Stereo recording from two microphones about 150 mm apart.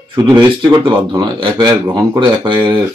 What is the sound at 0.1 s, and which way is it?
Speech, 30° right (ahead or behind).